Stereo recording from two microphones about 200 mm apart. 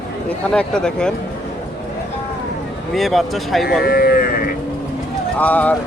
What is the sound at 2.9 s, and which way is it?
Speech, centre (ahead or behind).